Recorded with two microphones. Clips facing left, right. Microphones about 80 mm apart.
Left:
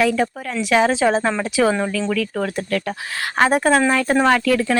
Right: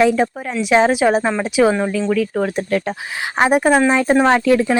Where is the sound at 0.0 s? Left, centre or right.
Right.